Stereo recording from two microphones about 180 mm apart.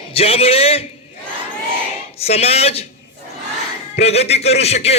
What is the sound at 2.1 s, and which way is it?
Speech, 35° left (ahead or behind).